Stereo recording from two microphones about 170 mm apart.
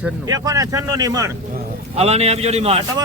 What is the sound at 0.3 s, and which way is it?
Speech, 20° right (ahead or behind).